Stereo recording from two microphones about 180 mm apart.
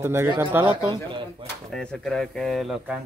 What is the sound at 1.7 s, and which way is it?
Speech, 5° left (ahead or behind).